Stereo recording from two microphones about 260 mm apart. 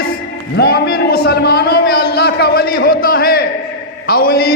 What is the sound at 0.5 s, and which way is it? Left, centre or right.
A man's voice, left.